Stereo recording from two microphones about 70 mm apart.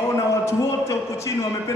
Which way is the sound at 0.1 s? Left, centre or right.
Left.